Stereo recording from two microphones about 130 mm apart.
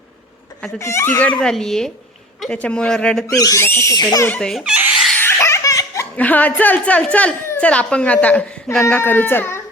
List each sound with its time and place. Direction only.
0.8 s speech: 20° left (ahead or behind)
1.4 s a woman's voice: 5° left (ahead or behind)
3.3 s speech: 25° left (ahead or behind)
4.3 s speech: 5° left (ahead or behind)
4.6 s laughter: 10° right (ahead or behind)
5.1 s laughter: 20° left (ahead or behind)
6.1 s a woman's voice: 10° left (ahead or behind)